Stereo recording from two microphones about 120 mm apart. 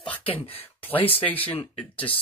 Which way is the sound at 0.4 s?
55° left (ahead or behind).